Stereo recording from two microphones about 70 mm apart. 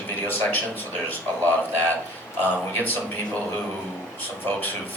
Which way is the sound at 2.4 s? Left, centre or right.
Left.